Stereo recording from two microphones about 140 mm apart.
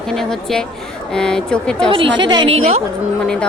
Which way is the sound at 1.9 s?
35° right (ahead or behind).